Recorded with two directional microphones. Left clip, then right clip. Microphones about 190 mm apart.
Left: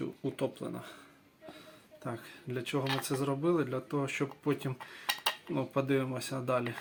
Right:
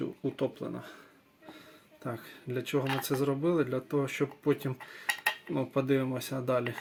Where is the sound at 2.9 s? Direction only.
Centre (ahead or behind).